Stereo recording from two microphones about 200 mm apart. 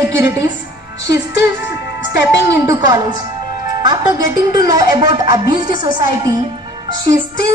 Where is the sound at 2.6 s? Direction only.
15° right (ahead or behind).